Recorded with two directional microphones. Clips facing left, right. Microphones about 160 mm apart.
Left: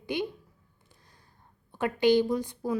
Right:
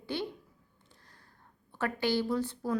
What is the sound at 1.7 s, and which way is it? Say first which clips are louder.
A woman's voice: left 7 dB; 15° left (ahead or behind).